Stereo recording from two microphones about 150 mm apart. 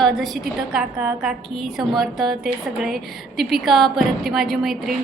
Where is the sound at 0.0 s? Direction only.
Centre (ahead or behind).